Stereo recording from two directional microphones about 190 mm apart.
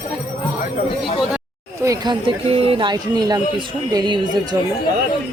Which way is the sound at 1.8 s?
20° right (ahead or behind).